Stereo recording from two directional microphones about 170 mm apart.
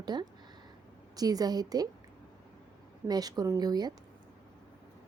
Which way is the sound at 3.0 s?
25° right (ahead or behind).